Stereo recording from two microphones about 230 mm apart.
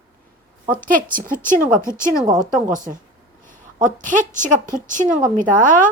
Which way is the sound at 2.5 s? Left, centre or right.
Right.